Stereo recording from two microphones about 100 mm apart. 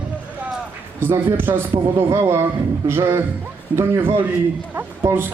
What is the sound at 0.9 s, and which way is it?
A man's voice, 25° right (ahead or behind).